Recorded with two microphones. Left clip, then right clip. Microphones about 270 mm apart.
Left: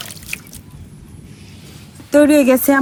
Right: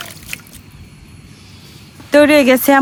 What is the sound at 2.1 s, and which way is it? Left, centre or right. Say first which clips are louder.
Speech: right 2 dB; right.